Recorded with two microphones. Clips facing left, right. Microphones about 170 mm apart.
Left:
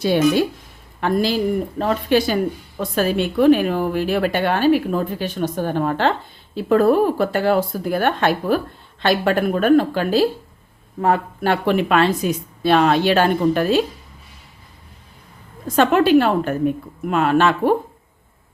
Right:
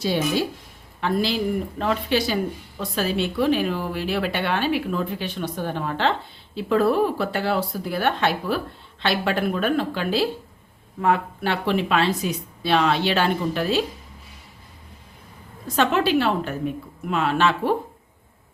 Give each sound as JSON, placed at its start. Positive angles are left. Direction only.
{"t": 0.0, "sound": "speech", "side_deg": 60}
{"t": 1.0, "sound": "a woman's voice", "side_deg": 45}
{"t": 15.6, "sound": "a woman's voice", "side_deg": 50}